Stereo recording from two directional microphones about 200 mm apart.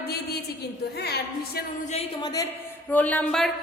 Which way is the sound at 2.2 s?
20° left (ahead or behind).